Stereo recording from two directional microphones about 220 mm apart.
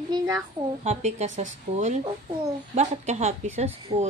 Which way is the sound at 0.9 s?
30° right (ahead or behind).